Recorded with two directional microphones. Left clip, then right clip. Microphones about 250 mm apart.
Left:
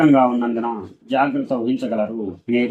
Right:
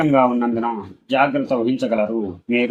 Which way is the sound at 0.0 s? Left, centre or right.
Right.